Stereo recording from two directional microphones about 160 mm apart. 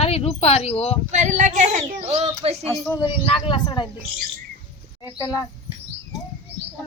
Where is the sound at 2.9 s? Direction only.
30° left (ahead or behind).